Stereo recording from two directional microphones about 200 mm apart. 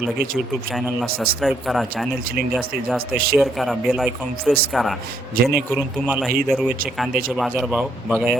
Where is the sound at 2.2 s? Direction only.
45° right (ahead or behind).